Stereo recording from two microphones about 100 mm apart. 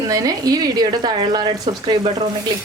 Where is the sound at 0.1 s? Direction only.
35° right (ahead or behind).